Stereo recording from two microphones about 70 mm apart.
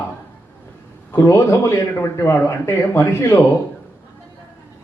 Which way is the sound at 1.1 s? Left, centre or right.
Left.